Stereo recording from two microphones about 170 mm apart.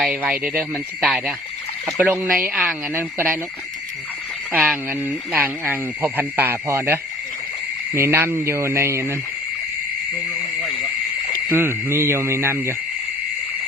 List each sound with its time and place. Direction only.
0.0 s speech: 5° right (ahead or behind)
2.0 s speech: 15° right (ahead or behind)
4.5 s speech: 10° right (ahead or behind)
11.4 s speech: 15° right (ahead or behind)